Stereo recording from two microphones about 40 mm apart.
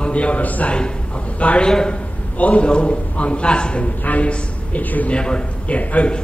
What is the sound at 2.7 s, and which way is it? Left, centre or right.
A man's voice, left.